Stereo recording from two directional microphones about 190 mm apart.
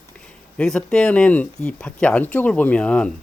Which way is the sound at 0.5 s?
5° left (ahead or behind).